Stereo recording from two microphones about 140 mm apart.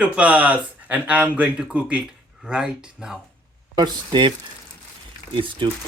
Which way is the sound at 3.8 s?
30° right (ahead or behind).